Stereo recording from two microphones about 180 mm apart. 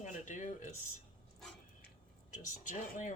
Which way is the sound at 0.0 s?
45° left (ahead or behind).